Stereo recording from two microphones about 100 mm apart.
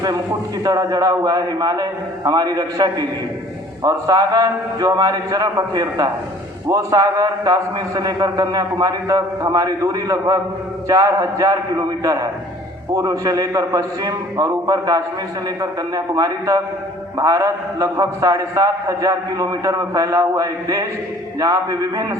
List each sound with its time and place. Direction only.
0.6 s a man's voice: 40° right (ahead or behind)